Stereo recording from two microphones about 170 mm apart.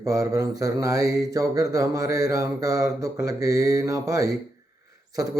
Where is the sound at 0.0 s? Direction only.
20° right (ahead or behind).